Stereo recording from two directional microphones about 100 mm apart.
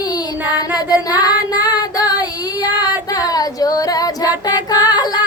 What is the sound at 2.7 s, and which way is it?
Female singing, 40° left (ahead or behind).